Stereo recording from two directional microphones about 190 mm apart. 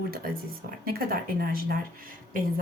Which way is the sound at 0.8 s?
50° right (ahead or behind).